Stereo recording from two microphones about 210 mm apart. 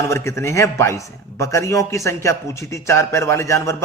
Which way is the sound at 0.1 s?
15° left (ahead or behind).